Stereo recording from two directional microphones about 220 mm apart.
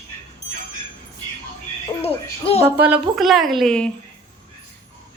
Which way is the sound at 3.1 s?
Centre (ahead or behind).